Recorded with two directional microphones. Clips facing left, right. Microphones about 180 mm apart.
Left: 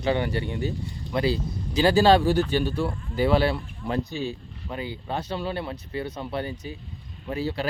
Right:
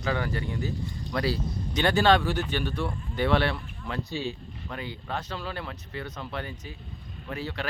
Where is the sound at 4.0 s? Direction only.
20° left (ahead or behind).